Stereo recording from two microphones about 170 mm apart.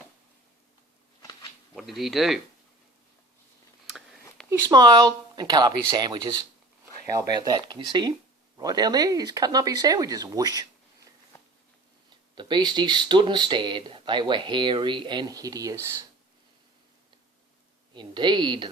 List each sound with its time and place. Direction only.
1.2 s a sound: 25° left (ahead or behind)
1.7 s speech: centre (ahead or behind)
3.8 s a sound: centre (ahead or behind)
4.4 s speech: 25° right (ahead or behind)
12.3 s speech: 25° right (ahead or behind)
17.9 s speech: 25° right (ahead or behind)